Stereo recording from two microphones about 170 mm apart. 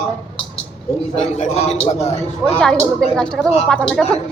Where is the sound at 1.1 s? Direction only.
40° left (ahead or behind).